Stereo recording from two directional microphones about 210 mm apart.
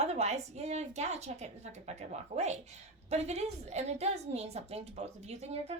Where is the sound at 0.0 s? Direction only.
30° right (ahead or behind).